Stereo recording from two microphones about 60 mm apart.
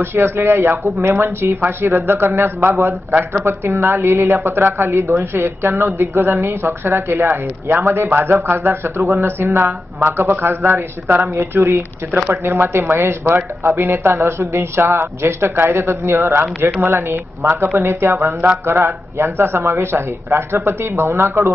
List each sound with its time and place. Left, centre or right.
0.0 s a man's voice: right